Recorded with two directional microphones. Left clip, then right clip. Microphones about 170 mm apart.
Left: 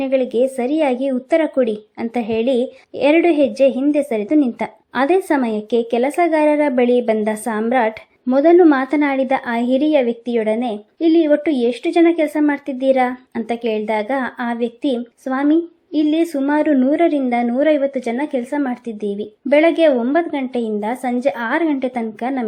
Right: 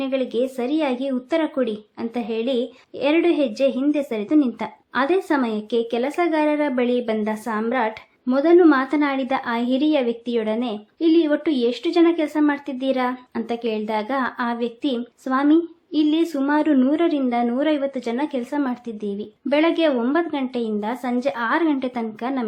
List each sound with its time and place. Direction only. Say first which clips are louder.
0.0 s a woman's voice: left 6 dB; 20° left (ahead or behind)